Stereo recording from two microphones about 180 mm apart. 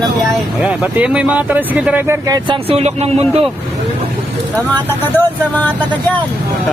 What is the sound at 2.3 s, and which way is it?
Speech, 25° right (ahead or behind).